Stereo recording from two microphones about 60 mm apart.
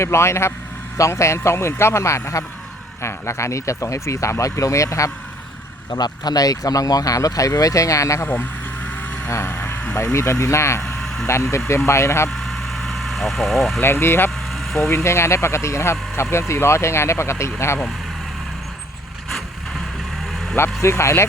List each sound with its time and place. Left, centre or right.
0.0 s speech: left
5.9 s speech: left
8.3 s vehicle: left
10.2 s speech: left
10.8 s vehicle: centre
11.9 s speech: left
12.3 s vehicle: centre
13.8 s speech: left
14.5 s vehicle: centre
14.8 s speech: left
20.8 s speech: left